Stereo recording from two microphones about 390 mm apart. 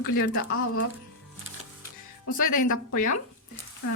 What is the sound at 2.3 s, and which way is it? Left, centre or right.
Speech, left.